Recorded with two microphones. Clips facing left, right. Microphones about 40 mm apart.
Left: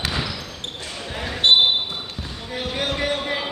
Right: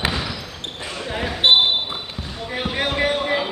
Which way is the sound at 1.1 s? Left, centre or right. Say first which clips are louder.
Right 1 dB; centre.